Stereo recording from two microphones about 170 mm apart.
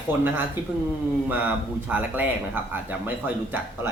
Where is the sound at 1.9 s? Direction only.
10° right (ahead or behind).